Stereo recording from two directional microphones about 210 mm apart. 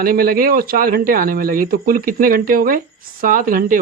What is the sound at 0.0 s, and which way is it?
Speech, 45° right (ahead or behind).